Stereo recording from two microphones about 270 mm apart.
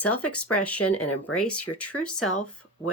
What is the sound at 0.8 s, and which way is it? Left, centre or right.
Speech, left.